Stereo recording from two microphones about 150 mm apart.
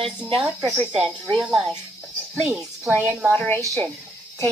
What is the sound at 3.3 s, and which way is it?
Speech, 15° left (ahead or behind).